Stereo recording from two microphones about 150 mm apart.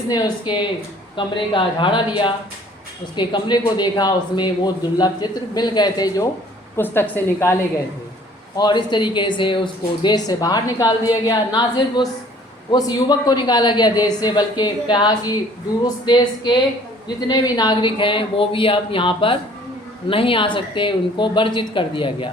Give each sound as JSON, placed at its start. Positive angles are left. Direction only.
{"t": 0.1, "sound": "a man's voice", "side_deg": 30}
{"t": 6.7, "sound": "a woman's voice", "side_deg": 15}
{"t": 8.5, "sound": "a man's voice", "side_deg": 30}